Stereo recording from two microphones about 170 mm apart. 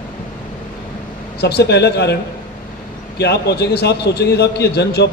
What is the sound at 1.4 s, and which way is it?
Speech, 75° left (ahead or behind).